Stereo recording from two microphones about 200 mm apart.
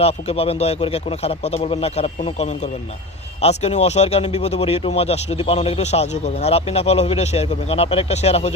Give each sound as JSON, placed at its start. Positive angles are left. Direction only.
{"t": 0.0, "sound": "speech", "side_deg": 30}